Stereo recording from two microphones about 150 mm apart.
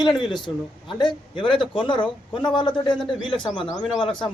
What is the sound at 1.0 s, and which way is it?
A man's voice, 30° left (ahead or behind).